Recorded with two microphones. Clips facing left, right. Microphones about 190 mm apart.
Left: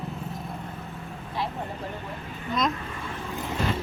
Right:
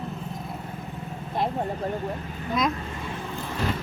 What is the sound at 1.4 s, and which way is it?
Speech, 50° right (ahead or behind).